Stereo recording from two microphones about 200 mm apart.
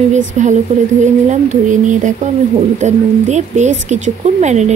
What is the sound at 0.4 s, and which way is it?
Speech, 35° right (ahead or behind).